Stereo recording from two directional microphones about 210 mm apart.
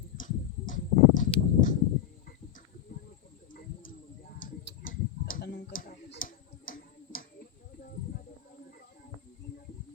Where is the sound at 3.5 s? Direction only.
40° left (ahead or behind).